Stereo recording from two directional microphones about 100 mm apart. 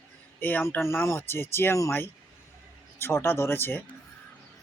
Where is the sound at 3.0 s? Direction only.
25° left (ahead or behind).